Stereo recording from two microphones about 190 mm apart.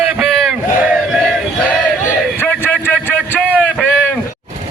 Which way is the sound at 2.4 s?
10° left (ahead or behind).